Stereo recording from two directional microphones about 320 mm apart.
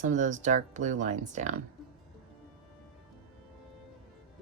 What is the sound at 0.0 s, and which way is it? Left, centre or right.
Speech, right.